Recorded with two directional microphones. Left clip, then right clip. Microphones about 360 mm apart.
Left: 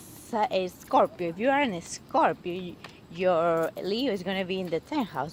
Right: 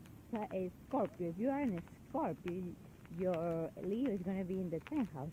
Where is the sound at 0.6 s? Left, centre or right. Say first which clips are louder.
Left 13 dB; centre.